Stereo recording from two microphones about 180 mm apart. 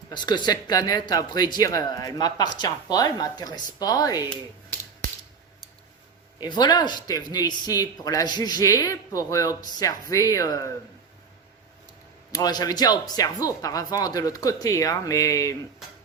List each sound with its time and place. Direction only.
0.1 s speech: 25° left (ahead or behind)
6.4 s speech: 25° left (ahead or behind)
12.3 s speech: 20° left (ahead or behind)